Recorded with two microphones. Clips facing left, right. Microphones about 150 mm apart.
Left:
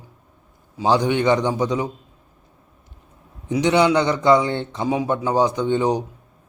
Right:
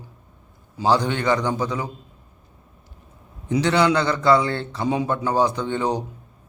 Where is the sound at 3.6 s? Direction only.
20° left (ahead or behind).